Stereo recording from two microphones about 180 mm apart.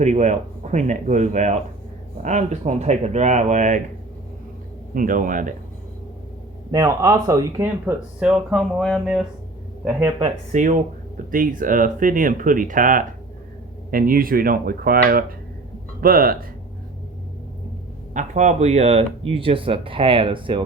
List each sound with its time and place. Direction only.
0.0 s speech: 40° right (ahead or behind)
4.9 s speech: 50° right (ahead or behind)
6.7 s speech: 20° right (ahead or behind); by 9.2 s centre (ahead or behind)
10.2 s speech: 45° right (ahead or behind)
18.1 s speech: 40° right (ahead or behind)